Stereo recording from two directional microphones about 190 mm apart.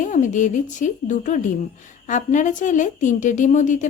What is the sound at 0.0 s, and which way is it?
Speech, 40° left (ahead or behind).